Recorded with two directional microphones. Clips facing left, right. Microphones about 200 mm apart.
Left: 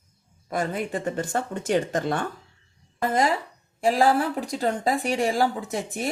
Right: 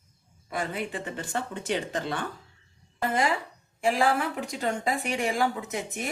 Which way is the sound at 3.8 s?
35° left (ahead or behind).